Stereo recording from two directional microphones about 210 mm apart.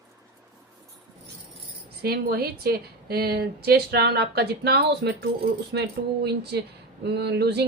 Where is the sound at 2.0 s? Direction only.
45° right (ahead or behind).